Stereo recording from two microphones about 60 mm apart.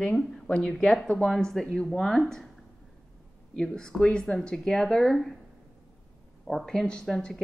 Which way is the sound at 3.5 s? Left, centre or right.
Centre.